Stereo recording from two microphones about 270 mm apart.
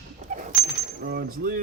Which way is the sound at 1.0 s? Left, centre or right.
Right.